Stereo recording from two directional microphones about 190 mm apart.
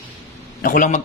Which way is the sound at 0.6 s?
45° left (ahead or behind).